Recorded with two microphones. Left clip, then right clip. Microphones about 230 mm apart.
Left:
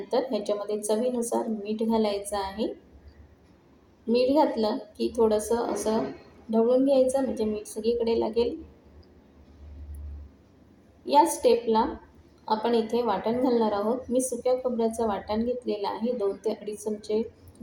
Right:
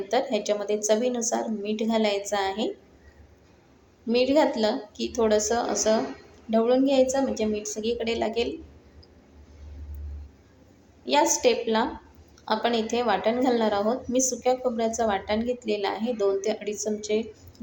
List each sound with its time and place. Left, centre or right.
0.1 s a woman's voice: right
4.1 s a woman's voice: right
6.5 s a woman's voice: right
11.0 s a woman's voice: right